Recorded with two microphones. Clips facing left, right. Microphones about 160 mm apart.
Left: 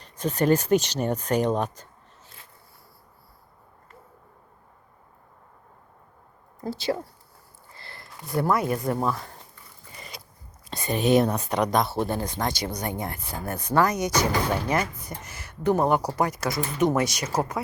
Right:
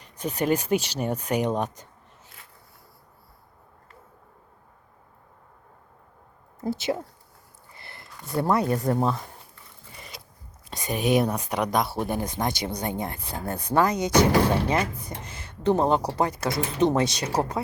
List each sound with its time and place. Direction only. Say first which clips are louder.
0.0 s speech: left 3 dB; 10° right (ahead or behind)
6.7 s speech: right 1 dB; 20° right (ahead or behind)
7.8 s a sound: left 1 dB; 20° right (ahead or behind)
8.7 s speech: right 2 dB; 35° right (ahead or behind)
9.0 s speech: right 2 dB; 20° right (ahead or behind)
10.7 s speech: left 2 dB; 10° right (ahead or behind)
12.2 s speech: even; 20° right (ahead or behind)